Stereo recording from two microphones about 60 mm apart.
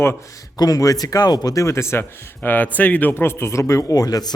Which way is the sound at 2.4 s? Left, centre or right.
Left.